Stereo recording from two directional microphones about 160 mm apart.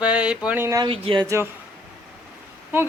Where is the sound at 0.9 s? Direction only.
35° right (ahead or behind).